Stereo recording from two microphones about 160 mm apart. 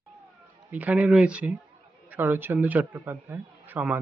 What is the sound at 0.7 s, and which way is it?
A man's voice, 10° right (ahead or behind).